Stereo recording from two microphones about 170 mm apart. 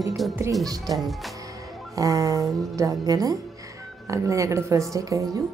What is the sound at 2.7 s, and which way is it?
Speech, 20° right (ahead or behind).